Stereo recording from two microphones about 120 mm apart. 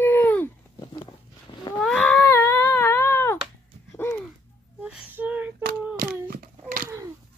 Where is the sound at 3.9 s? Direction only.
20° left (ahead or behind).